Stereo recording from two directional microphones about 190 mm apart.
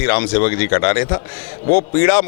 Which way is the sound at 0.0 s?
15° left (ahead or behind).